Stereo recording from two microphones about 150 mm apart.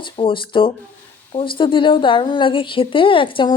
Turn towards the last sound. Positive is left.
turn(degrees=30)  # may be behind; listen again after turning